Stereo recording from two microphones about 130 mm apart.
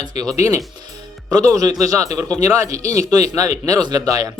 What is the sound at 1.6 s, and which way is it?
Speech, 25° right (ahead or behind).